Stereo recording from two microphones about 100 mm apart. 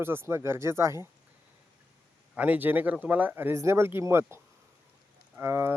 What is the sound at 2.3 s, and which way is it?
Speech, 15° right (ahead or behind).